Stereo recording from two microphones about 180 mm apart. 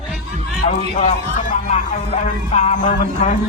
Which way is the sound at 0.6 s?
40° left (ahead or behind).